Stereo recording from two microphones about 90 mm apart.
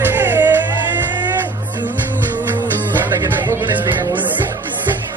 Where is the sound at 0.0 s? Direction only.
25° right (ahead or behind).